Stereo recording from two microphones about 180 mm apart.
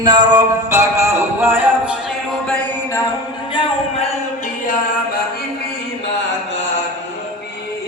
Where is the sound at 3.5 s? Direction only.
35° left (ahead or behind).